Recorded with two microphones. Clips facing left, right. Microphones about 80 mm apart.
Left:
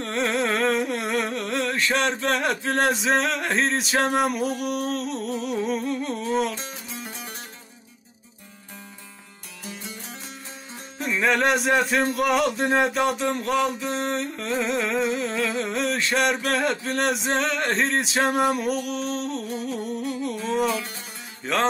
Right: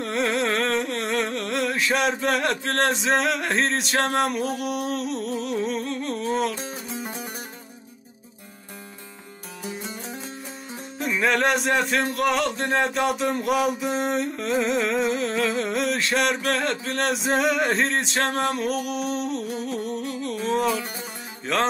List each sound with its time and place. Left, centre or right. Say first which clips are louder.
0.0 s a sound: right 1 dB; centre
6.5 s music: right 3 dB; centre
11.0 s music: even; centre